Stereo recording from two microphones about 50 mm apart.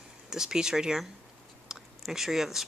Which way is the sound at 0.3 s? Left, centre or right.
Centre.